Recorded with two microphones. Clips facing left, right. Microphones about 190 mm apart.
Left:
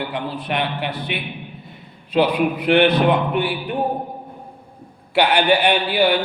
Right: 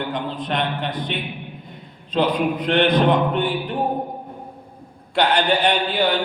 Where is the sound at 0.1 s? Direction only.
10° left (ahead or behind).